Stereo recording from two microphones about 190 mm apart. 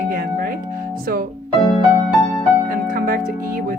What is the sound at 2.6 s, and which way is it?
Music, 50° right (ahead or behind).